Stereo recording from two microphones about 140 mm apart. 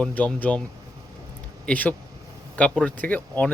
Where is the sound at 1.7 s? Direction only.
10° left (ahead or behind).